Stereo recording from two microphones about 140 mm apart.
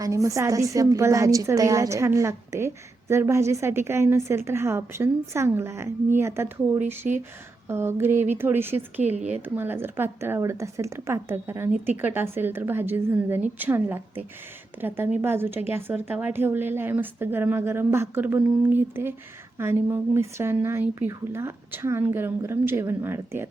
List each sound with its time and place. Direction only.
0.0 s a woman's voice: 20° right (ahead or behind)
9.1 s speech: 55° right (ahead or behind)
9.6 s speech: 15° right (ahead or behind)